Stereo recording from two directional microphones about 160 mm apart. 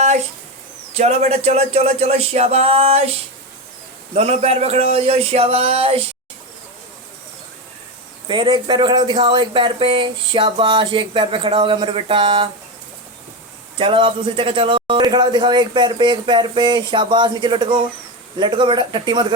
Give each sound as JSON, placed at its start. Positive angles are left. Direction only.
{"t": 0.0, "sound": "a sound", "side_deg": -45}
{"t": 0.9, "sound": "speech", "side_deg": -40}
{"t": 8.3, "sound": "speech", "side_deg": -30}
{"t": 13.7, "sound": "a man's voice", "side_deg": -35}